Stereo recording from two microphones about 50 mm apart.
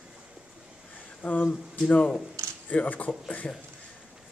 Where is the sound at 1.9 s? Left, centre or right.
Left.